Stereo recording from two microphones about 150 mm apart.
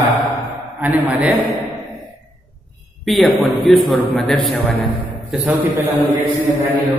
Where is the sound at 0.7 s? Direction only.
10° right (ahead or behind).